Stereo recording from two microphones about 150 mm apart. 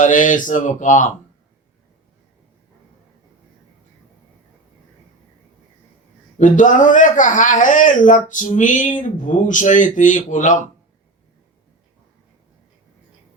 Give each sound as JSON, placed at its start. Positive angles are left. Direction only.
{"t": 0.0, "sound": "speech", "side_deg": 60}
{"t": 6.4, "sound": "speech", "side_deg": 55}